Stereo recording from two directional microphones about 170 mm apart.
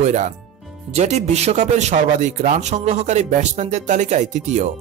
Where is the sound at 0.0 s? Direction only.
45° right (ahead or behind).